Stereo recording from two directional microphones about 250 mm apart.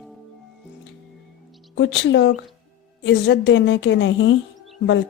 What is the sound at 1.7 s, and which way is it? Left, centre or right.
Speech, left.